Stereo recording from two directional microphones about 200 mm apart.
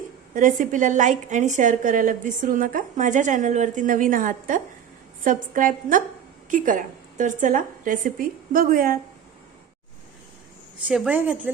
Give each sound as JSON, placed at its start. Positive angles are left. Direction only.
{"t": 0.3, "sound": "a woman's voice", "side_deg": -40}
{"t": 10.8, "sound": "a woman's voice", "side_deg": -5}